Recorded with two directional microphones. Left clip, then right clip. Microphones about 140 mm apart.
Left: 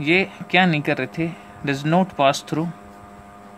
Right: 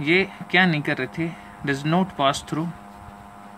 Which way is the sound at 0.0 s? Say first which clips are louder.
Left 1 dB; 30° left (ahead or behind).